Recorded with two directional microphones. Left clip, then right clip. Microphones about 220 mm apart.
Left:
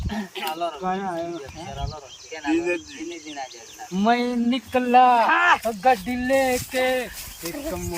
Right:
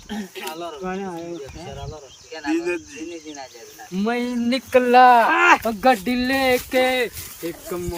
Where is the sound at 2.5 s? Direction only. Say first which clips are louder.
Even; 15° right (ahead or behind).